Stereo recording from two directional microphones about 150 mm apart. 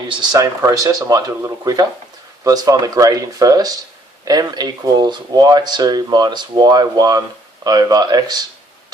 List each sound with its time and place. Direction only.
0.1 s speech: 30° right (ahead or behind)